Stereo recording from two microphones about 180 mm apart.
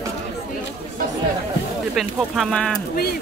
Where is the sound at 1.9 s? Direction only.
5° left (ahead or behind).